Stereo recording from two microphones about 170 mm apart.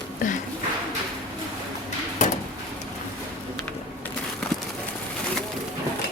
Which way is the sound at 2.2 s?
45° left (ahead or behind).